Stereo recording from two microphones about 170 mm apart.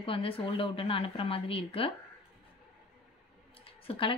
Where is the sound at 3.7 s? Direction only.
30° left (ahead or behind).